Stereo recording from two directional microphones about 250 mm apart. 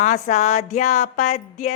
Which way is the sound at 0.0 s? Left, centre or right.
Left.